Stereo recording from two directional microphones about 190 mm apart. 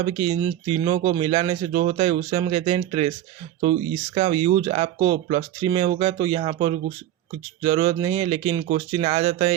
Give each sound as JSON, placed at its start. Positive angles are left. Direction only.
{"t": 0.0, "sound": "speech", "side_deg": -25}